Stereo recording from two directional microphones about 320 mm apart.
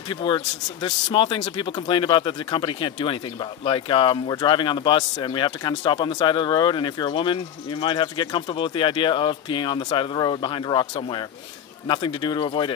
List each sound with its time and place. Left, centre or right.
0.1 s speech: centre